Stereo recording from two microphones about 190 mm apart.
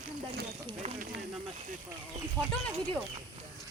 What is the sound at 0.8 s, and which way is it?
Speech, 35° right (ahead or behind).